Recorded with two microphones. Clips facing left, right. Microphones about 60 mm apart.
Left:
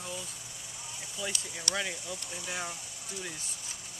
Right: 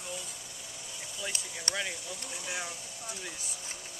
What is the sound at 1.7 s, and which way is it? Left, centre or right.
Speech, centre.